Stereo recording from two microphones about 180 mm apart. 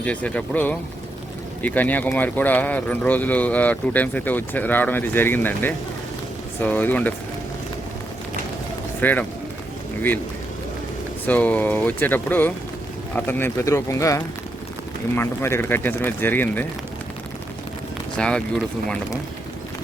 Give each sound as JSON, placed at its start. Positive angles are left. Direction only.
{"t": 0.0, "sound": "speech", "side_deg": 5}
{"t": 9.0, "sound": "speech", "side_deg": 10}
{"t": 11.3, "sound": "speech", "side_deg": 10}
{"t": 18.2, "sound": "speech", "side_deg": 5}